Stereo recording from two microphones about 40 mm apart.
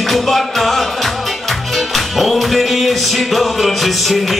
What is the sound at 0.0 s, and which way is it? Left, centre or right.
Music, centre.